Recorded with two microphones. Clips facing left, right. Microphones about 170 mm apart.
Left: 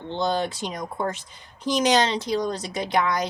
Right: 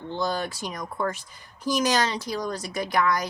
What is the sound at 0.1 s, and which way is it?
A woman's voice, 25° left (ahead or behind).